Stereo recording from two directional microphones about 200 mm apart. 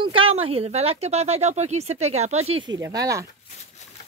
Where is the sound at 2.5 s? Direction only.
20° right (ahead or behind).